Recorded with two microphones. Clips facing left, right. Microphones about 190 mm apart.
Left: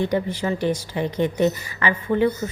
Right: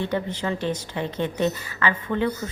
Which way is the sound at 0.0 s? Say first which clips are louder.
Left 4 dB; 10° left (ahead or behind).